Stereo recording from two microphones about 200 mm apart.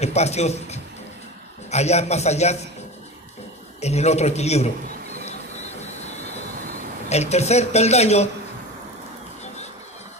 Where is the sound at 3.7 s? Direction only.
35° left (ahead or behind).